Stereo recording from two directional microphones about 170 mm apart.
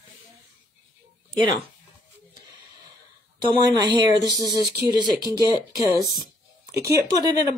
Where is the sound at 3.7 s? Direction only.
25° right (ahead or behind).